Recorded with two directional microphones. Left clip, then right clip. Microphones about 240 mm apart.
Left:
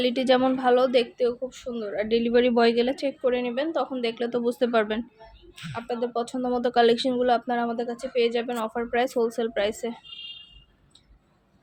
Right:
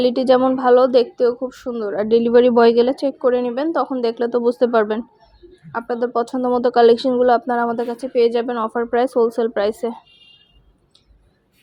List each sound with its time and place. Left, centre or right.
0.0 s a woman's voice: centre
5.7 s a woman's voice: right; by 10.0 s centre